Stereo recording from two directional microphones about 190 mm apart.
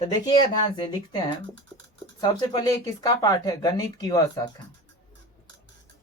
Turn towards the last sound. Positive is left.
turn(degrees=20)  # may be behind; listen again after turning